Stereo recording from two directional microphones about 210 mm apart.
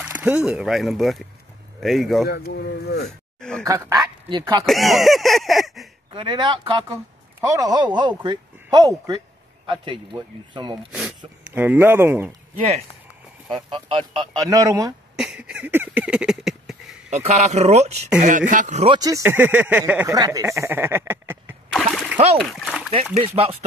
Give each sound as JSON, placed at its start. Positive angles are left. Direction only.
{"t": 0.0, "sound": "speech", "side_deg": -10}
{"t": 2.2, "sound": "speech", "side_deg": 45}
{"t": 3.3, "sound": "speech", "side_deg": 5}
{"t": 3.6, "sound": "speech", "side_deg": -15}
{"t": 4.6, "sound": "speech", "side_deg": 0}
{"t": 6.1, "sound": "speech", "side_deg": -20}
{"t": 10.9, "sound": "speech", "side_deg": -5}
{"t": 13.5, "sound": "speech", "side_deg": -25}
{"t": 15.1, "sound": "a sound", "side_deg": -5}
{"t": 17.1, "sound": "speech", "side_deg": -30}
{"t": 18.9, "sound": "speech", "side_deg": -15}
{"t": 21.7, "sound": "splash", "side_deg": 0}
{"t": 22.4, "sound": "speech", "side_deg": 0}
{"t": 23.1, "sound": "speech", "side_deg": -25}